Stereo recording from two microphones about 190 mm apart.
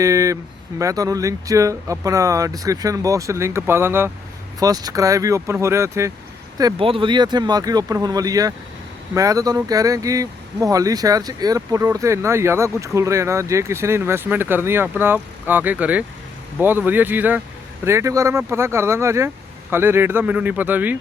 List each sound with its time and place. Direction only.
0.0 s speech: 15° right (ahead or behind)